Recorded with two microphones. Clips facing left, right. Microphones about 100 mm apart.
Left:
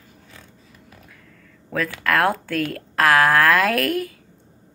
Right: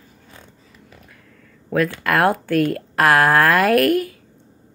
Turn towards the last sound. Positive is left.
turn(degrees=-10)  # may be behind; listen again after turning